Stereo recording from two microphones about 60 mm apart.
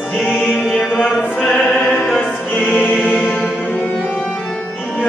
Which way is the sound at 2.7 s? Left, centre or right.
Left.